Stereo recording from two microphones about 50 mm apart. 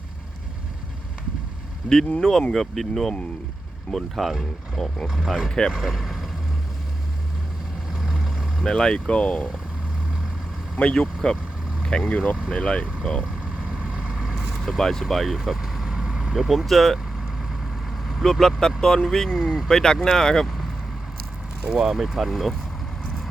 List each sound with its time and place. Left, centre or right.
2.5 s speech: centre
5.5 s speech: centre
5.8 s speech: centre
7.9 s vehicle: centre
8.6 s speech: centre
10.8 s speech: centre
13.7 s vehicle: right
14.5 s speech: centre
18.3 s speech: centre
19.7 s speech: centre
21.7 s speech: centre